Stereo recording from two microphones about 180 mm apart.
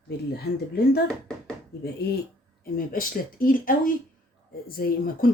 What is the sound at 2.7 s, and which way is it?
Speech, 50° left (ahead or behind).